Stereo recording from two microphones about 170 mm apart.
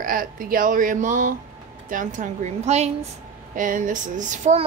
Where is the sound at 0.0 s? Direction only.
55° right (ahead or behind).